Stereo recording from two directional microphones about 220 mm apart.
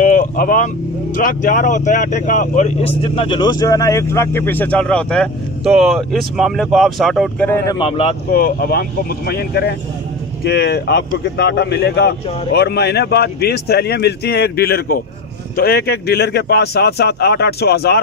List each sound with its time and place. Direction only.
0.0 s vehicle: 40° left (ahead or behind)
1.1 s speech: 35° left (ahead or behind)
3.0 s speech: 25° left (ahead or behind)
7.8 s speech: 25° left (ahead or behind)
8.3 s speech: 40° left (ahead or behind)